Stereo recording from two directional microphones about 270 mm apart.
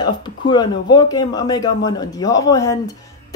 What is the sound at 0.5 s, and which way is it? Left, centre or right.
Speech, centre.